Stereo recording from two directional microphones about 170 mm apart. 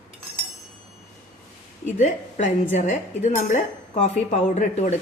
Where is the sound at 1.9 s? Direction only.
45° left (ahead or behind).